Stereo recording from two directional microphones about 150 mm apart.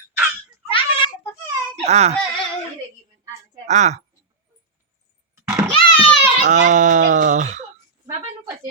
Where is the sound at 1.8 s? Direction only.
45° right (ahead or behind).